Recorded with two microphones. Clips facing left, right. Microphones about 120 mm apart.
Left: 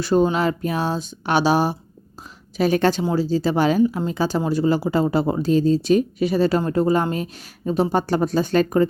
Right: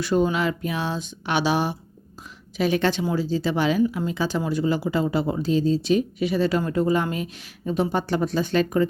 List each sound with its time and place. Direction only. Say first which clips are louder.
0.0 s speech: left 3 dB; 35° left (ahead or behind)